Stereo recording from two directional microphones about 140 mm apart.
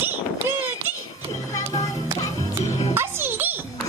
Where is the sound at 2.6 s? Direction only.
50° left (ahead or behind).